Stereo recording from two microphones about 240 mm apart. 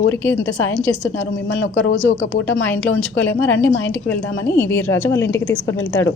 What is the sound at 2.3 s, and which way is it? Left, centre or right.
Speech, left.